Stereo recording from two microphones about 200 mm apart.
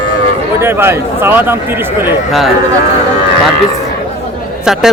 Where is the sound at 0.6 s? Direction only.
10° right (ahead or behind).